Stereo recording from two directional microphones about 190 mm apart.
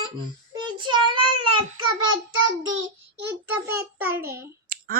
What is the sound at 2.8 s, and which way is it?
Child singing, 15° right (ahead or behind).